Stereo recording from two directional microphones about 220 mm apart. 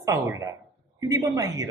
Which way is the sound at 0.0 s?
15° right (ahead or behind).